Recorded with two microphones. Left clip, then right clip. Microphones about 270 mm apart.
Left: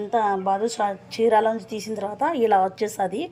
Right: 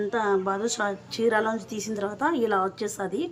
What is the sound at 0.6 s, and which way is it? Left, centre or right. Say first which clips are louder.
Speech: left 4 dB; centre.